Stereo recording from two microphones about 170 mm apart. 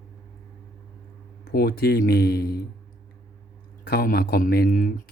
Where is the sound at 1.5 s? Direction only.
65° left (ahead or behind).